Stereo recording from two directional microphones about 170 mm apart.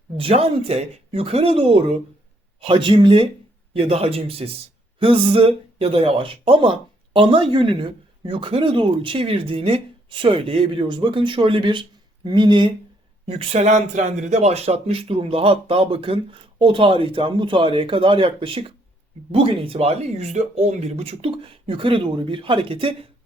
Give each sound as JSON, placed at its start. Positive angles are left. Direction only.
{"t": 0.2, "sound": "speech", "side_deg": -35}